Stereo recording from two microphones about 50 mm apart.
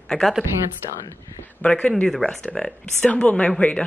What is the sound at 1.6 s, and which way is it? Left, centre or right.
A woman's voice, left.